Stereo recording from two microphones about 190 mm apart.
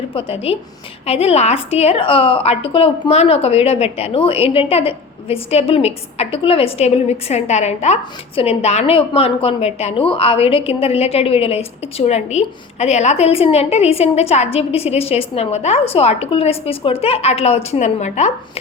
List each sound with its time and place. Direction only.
0.1 s a woman's voice: 30° left (ahead or behind)